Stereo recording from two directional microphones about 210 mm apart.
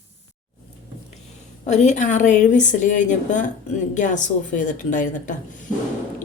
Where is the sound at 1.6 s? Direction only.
35° left (ahead or behind).